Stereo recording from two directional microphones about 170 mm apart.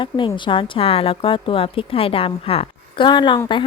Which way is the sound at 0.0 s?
30° left (ahead or behind).